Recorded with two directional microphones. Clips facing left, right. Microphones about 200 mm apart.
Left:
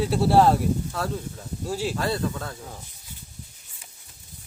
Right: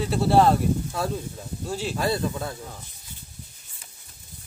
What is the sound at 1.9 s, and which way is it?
Speech, 10° right (ahead or behind).